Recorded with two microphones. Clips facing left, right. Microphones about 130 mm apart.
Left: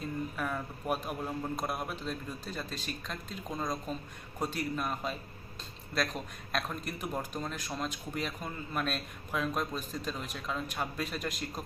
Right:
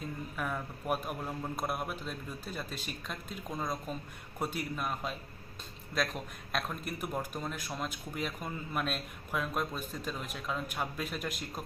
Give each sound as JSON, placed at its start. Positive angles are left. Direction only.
{"t": 0.3, "sound": "a man's voice", "side_deg": 0}